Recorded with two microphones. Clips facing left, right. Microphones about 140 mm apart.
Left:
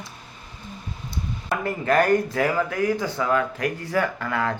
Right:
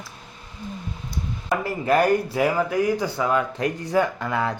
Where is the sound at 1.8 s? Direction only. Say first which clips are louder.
Even; 10° right (ahead or behind).